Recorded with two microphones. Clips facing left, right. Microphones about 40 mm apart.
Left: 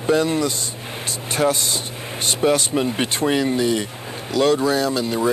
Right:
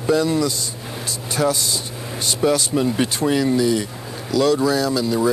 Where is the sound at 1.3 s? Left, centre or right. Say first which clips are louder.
Left 1 dB; left.